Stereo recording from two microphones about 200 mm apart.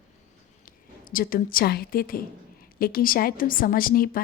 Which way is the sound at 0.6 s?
45° left (ahead or behind).